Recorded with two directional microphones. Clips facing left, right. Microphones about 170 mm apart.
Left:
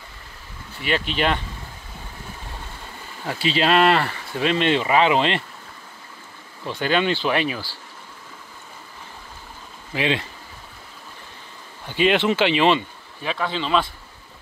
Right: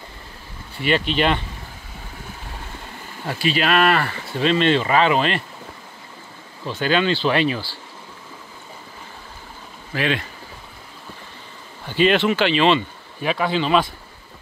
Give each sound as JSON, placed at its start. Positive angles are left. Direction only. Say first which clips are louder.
{"t": 0.8, "sound": "speech", "louder": "right 3 dB", "side_deg": 5}
{"t": 3.3, "sound": "speech", "louder": "left 1 dB", "side_deg": 25}
{"t": 6.7, "sound": "speech", "louder": "right 1 dB", "side_deg": 15}
{"t": 9.9, "sound": "speech", "louder": "even", "side_deg": 25}
{"t": 12.0, "sound": "speech", "louder": "right 1 dB", "side_deg": 15}
{"t": 13.2, "sound": "speech", "louder": "right 5 dB", "side_deg": -10}